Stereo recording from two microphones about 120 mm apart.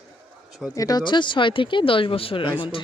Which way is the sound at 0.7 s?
30° left (ahead or behind).